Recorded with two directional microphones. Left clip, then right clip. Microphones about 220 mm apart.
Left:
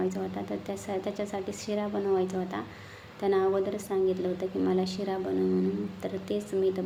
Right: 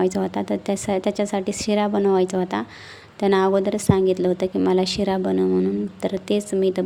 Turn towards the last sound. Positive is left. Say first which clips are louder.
# right 7 dB
turn(degrees=-45)  # may be behind; listen again after turning